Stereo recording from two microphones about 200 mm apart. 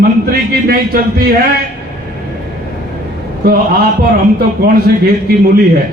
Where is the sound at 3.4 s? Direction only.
50° right (ahead or behind).